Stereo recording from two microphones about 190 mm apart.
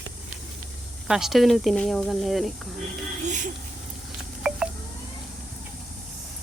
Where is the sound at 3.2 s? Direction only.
40° right (ahead or behind).